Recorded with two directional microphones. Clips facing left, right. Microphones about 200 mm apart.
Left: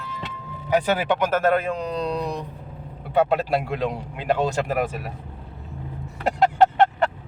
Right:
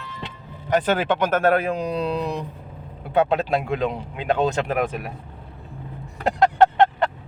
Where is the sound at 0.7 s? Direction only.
10° left (ahead or behind).